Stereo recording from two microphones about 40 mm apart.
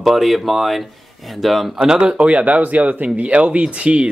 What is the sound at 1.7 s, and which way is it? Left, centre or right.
Speech, centre.